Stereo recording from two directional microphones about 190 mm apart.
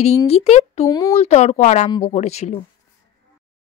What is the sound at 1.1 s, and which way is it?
Speech, 35° left (ahead or behind).